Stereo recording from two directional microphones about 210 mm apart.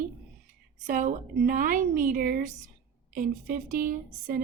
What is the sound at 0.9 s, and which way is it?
A woman's voice, 40° right (ahead or behind).